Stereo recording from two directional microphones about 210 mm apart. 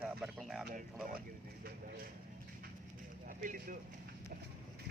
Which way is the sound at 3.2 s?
40° right (ahead or behind).